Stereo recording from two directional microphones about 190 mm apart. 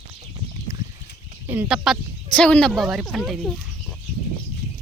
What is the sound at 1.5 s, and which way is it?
Speech, 5° right (ahead or behind).